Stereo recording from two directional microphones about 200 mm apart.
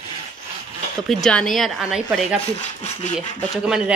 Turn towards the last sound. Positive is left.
turn(degrees=0)  # may be behind; listen again after turning